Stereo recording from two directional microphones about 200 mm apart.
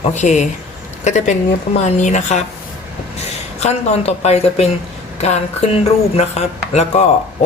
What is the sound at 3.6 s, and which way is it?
Speech, 35° left (ahead or behind).